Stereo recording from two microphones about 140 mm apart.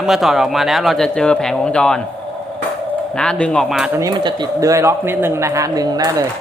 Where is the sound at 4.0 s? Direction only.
30° right (ahead or behind).